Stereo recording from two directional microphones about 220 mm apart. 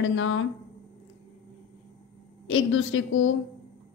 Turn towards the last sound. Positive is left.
turn(degrees=60)  # may be behind; listen again after turning